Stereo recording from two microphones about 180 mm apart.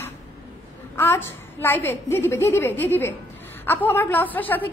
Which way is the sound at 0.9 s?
10° left (ahead or behind).